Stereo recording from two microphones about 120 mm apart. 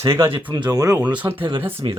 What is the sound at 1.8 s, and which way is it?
Speech, 40° right (ahead or behind).